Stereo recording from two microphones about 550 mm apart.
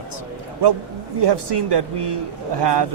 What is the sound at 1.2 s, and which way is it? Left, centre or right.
Speech, right.